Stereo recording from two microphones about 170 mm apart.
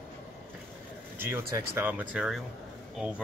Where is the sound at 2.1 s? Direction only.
Centre (ahead or behind).